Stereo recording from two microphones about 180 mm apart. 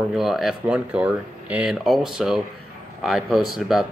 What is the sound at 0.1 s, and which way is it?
Speech, centre (ahead or behind).